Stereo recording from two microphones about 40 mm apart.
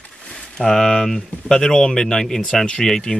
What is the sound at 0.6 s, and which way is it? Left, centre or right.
Speech, centre.